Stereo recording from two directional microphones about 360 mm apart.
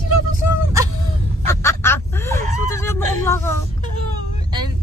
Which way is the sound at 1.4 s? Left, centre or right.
Centre.